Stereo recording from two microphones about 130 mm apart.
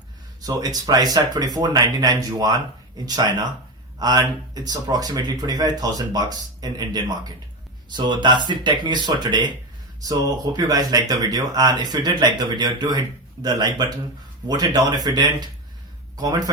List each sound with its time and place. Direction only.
0.4 s speech: 30° right (ahead or behind)